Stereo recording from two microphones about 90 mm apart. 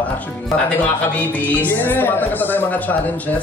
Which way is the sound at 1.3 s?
15° left (ahead or behind).